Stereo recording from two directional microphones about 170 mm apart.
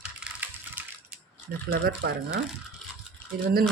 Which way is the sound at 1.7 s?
70° right (ahead or behind).